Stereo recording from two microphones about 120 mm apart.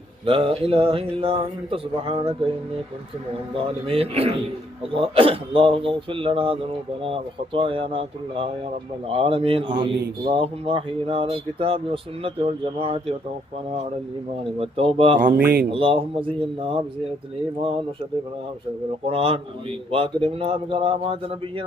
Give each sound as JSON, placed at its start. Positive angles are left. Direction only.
{"t": 0.3, "sound": "speech", "side_deg": -50}
{"t": 3.8, "sound": "a man's voice", "side_deg": -55}
{"t": 14.4, "sound": "speech", "side_deg": -50}
{"t": 15.4, "sound": "speech", "side_deg": -15}
{"t": 15.7, "sound": "speech", "side_deg": -50}
{"t": 19.0, "sound": "a man's voice", "side_deg": -55}